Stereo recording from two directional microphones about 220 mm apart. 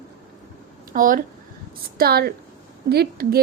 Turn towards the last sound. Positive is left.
turn(degrees=-45)  # may be behind; listen again after turning